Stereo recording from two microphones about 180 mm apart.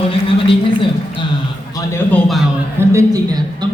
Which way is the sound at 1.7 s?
15° left (ahead or behind).